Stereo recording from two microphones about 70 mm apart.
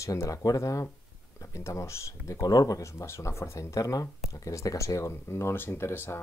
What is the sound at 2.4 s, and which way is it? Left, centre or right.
Speech, left.